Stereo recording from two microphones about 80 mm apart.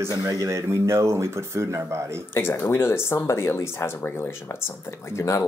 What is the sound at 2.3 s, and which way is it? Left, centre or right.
Speech, left.